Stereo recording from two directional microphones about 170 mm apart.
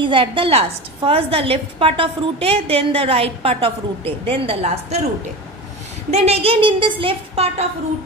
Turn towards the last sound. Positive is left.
turn(degrees=-35)  # may be behind; listen again after turning